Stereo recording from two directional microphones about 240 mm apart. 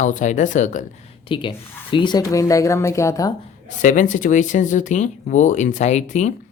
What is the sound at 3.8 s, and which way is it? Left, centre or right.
Speech, left.